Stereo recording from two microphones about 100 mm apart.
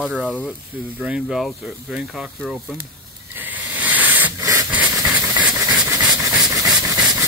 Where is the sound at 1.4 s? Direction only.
Centre (ahead or behind).